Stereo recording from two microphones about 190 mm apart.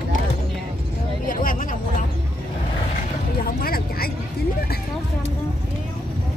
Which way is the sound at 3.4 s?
50° left (ahead or behind).